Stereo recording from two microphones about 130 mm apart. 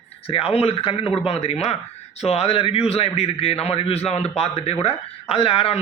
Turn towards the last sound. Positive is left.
turn(degrees=45)  # may be behind; listen again after turning